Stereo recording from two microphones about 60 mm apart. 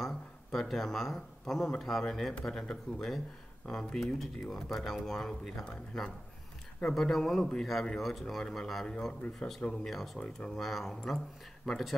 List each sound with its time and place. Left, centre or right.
0.0 s a man's voice: centre
10.1 s speech: centre
10.5 s speech: centre